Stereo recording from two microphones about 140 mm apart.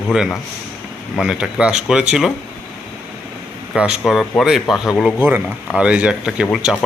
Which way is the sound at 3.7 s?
5° right (ahead or behind).